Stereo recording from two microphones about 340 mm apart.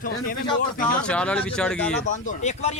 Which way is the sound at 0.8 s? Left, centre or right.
Centre.